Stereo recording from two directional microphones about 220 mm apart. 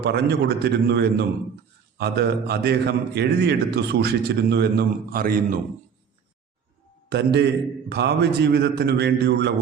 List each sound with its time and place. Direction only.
0.0 s a man's voice: 50° right (ahead or behind)
7.1 s a man's voice: 50° right (ahead or behind)